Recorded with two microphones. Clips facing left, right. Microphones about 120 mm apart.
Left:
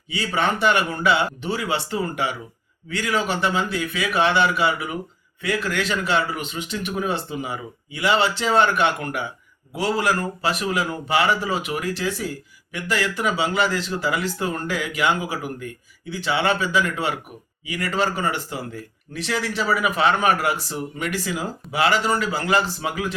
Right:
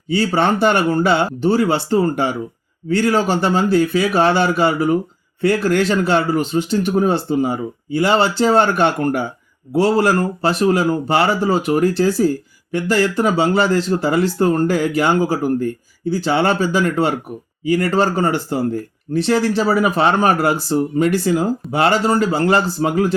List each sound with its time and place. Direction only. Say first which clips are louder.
0.1 s speech: right 7 dB; 35° right (ahead or behind)